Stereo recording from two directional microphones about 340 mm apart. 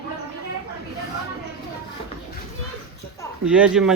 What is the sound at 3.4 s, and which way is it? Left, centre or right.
Speech, centre.